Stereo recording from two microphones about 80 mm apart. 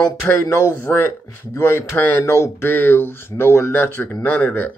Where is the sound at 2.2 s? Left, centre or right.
Left.